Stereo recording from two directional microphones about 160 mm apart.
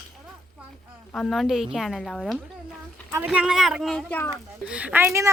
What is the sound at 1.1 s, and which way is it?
Speech, centre (ahead or behind).